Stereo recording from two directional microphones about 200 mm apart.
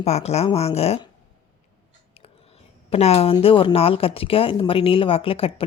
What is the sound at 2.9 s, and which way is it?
Speech, 30° left (ahead or behind).